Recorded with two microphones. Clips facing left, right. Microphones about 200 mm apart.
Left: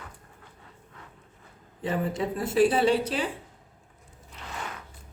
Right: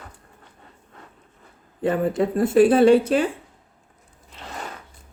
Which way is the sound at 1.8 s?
55° right (ahead or behind).